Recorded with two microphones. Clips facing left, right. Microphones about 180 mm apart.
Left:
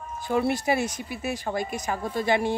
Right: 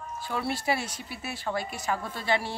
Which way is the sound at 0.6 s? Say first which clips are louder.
Left 4 dB; 50° left (ahead or behind).